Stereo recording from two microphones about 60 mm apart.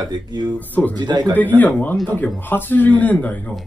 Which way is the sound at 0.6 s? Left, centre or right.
Left.